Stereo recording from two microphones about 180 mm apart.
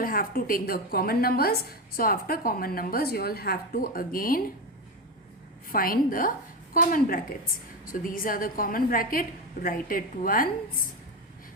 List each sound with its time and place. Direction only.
0.0 s a woman's voice: 50° left (ahead or behind)
5.7 s a woman's voice: 50° left (ahead or behind)